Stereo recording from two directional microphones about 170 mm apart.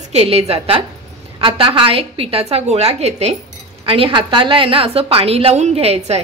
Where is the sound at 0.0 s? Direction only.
40° right (ahead or behind).